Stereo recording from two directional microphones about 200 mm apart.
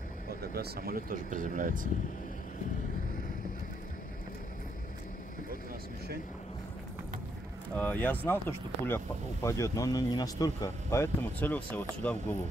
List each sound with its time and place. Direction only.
0.4 s speech: 50° right (ahead or behind)
7.7 s speech: 10° left (ahead or behind)